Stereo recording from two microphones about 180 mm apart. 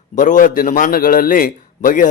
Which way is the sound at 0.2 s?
45° left (ahead or behind).